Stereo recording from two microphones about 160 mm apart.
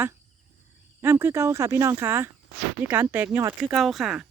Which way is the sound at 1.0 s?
15° right (ahead or behind).